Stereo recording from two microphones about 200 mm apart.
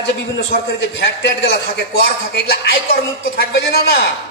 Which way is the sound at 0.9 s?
55° left (ahead or behind).